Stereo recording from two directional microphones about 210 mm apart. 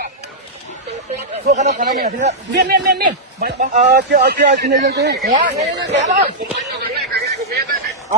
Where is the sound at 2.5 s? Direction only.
50° right (ahead or behind).